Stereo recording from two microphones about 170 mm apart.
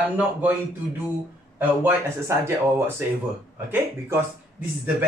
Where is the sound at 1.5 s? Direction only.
15° right (ahead or behind).